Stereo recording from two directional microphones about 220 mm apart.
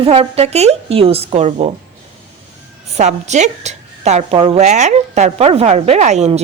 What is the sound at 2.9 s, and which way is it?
A woman's voice, 30° right (ahead or behind).